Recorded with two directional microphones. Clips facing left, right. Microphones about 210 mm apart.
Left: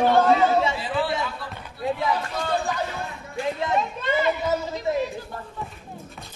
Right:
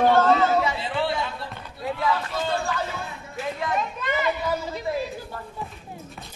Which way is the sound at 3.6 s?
25° left (ahead or behind).